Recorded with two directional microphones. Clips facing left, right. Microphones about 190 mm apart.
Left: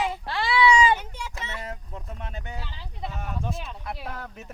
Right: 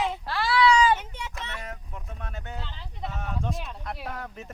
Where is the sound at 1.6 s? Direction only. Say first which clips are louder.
Left 3 dB; 30° left (ahead or behind).